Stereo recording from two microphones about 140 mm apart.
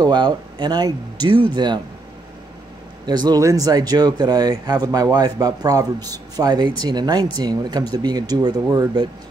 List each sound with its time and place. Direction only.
0.0 s speech: 30° right (ahead or behind)
3.1 s speech: 30° right (ahead or behind)